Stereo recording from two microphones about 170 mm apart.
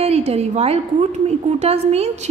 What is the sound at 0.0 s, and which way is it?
A woman's voice, 40° right (ahead or behind).